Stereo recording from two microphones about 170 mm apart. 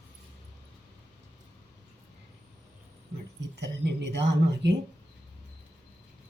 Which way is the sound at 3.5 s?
90° right.